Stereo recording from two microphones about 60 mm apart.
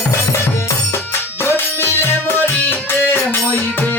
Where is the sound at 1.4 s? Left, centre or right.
Left.